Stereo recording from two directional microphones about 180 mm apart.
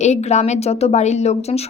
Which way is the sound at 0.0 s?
40° left (ahead or behind).